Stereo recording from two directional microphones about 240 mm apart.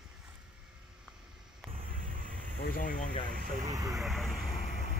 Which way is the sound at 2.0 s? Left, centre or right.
Right.